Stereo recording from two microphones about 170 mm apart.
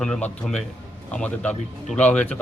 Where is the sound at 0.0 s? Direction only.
5° left (ahead or behind).